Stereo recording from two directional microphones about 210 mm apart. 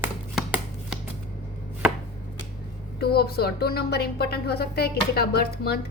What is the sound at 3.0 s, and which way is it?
Speech, 50° left (ahead or behind).